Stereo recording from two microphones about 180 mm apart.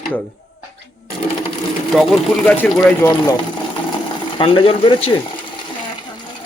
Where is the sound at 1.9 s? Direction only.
Centre (ahead or behind).